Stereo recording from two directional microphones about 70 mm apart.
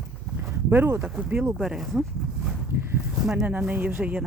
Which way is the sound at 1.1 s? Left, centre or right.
Centre.